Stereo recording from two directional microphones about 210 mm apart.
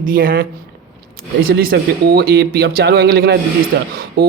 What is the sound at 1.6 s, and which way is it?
Speech, 45° right (ahead or behind).